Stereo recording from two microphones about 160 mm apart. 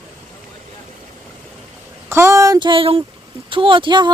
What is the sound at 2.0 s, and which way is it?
Speech, 15° right (ahead or behind).